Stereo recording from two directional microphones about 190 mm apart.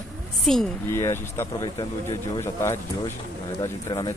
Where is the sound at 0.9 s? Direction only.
15° left (ahead or behind).